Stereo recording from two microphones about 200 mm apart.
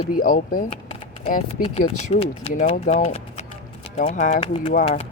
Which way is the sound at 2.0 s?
35° left (ahead or behind).